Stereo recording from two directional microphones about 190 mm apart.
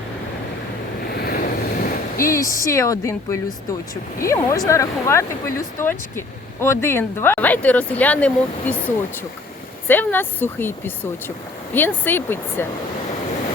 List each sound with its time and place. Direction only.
1.0 s waves: 55° left (ahead or behind)
2.3 s speech: 15° left (ahead or behind)
9.8 s speech: 10° left (ahead or behind)